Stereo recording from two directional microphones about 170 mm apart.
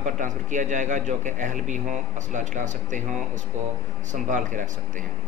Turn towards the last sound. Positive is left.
turn(degrees=-45)  # may be behind; listen again after turning